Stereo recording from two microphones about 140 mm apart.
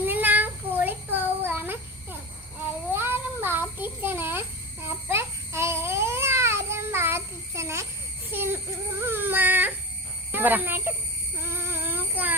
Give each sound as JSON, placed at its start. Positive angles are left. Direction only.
{"t": 0.0, "sound": "child singing", "side_deg": -15}
{"t": 5.0, "sound": "babbling", "side_deg": -20}
{"t": 8.3, "sound": "baby cry", "side_deg": -15}
{"t": 10.3, "sound": "speech", "side_deg": -15}
{"t": 11.5, "sound": "child singing", "side_deg": -15}